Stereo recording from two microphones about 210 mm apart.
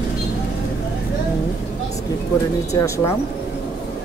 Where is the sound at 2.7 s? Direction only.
15° left (ahead or behind).